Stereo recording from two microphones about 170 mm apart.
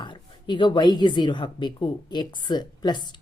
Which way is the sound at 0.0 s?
25° left (ahead or behind).